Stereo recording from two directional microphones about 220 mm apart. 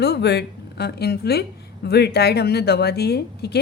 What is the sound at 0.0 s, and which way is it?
Speech, 50° left (ahead or behind).